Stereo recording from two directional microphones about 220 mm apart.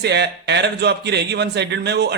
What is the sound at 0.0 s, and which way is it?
A man's voice, 50° right (ahead or behind).